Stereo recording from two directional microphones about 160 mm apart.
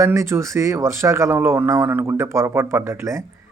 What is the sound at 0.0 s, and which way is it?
Speech, 15° right (ahead or behind).